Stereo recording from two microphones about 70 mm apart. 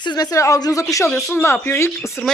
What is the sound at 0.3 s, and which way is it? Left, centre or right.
Speech, left.